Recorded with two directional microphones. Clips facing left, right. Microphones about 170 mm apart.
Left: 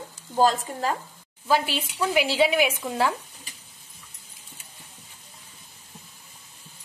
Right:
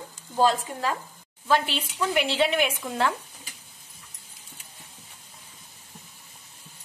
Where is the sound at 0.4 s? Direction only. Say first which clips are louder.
Left 1 dB; 40° left (ahead or behind).